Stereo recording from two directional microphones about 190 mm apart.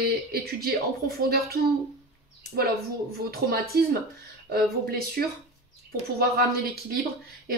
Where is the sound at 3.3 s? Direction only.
55° right (ahead or behind).